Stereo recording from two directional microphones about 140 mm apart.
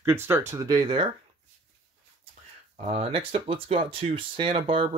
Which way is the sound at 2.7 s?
45° right (ahead or behind).